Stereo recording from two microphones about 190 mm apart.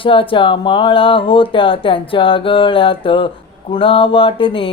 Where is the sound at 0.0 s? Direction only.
25° left (ahead or behind).